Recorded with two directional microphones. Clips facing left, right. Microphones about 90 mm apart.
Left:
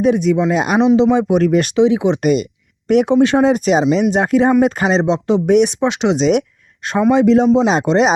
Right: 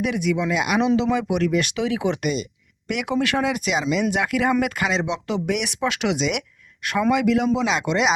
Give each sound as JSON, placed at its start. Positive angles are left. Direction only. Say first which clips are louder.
{"t": 0.0, "sound": "speech", "louder": "left 9 dB", "side_deg": 35}
{"t": 1.8, "sound": "speech", "louder": "left 10 dB", "side_deg": 25}
{"t": 2.2, "sound": "speech", "louder": "left 10 dB", "side_deg": 55}
{"t": 2.8, "sound": "speech", "louder": "left 11 dB", "side_deg": 35}